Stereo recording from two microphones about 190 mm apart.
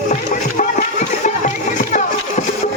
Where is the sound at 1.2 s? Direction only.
40° left (ahead or behind).